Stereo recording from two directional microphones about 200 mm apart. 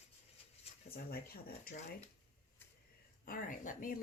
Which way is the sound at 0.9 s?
50° left (ahead or behind).